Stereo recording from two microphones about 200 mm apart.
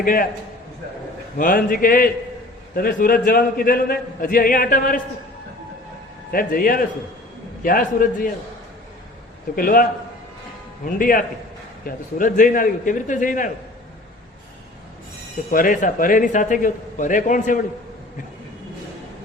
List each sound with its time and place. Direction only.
0.0 s a man's voice: 45° left (ahead or behind)
1.4 s a man's voice: 45° left (ahead or behind)
6.3 s a man's voice: 45° left (ahead or behind)
9.6 s a man's voice: 45° left (ahead or behind)
15.4 s a man's voice: 40° left (ahead or behind)